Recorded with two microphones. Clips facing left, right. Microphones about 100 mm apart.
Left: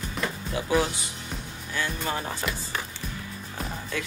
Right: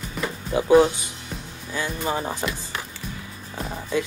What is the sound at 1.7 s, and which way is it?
Speech, 15° right (ahead or behind).